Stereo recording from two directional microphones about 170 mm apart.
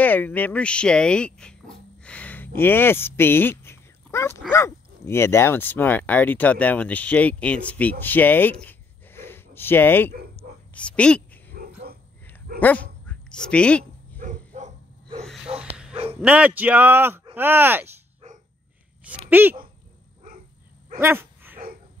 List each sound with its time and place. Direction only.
0.0 s speech: 10° left (ahead or behind)
2.0 s a sound: 10° left (ahead or behind)
4.5 s speech: 15° left (ahead or behind)
8.6 s a sound: 10° left (ahead or behind)
10.3 s whispering: 5° left (ahead or behind)
11.5 s dog: 65° right (ahead or behind)
12.5 s speech: 10° left (ahead or behind)
13.0 s dog: 5° left (ahead or behind)
14.2 s dog: 45° right (ahead or behind)
15.2 s snort: centre (ahead or behind)
16.2 s speech: 10° right (ahead or behind)
19.0 s speech: 10° right (ahead or behind)
21.0 s dog: 15° right (ahead or behind)